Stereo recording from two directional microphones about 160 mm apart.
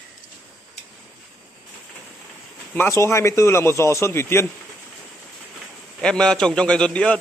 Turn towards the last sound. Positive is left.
turn(degrees=5)  # may be behind; listen again after turning